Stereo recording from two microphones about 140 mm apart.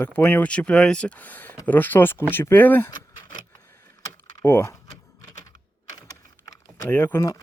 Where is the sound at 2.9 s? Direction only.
30° left (ahead or behind).